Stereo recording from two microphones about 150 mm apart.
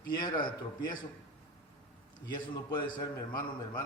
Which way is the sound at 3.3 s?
30° left (ahead or behind).